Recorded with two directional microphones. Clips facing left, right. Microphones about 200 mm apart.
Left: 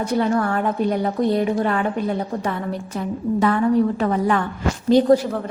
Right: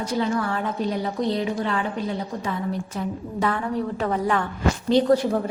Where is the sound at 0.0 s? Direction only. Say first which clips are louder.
Left 4 dB; 55° left (ahead or behind).